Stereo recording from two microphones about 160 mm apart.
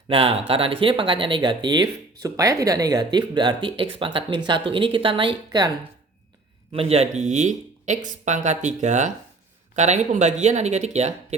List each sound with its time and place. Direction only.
0.1 s speech: 35° right (ahead or behind)
6.7 s speech: 40° right (ahead or behind)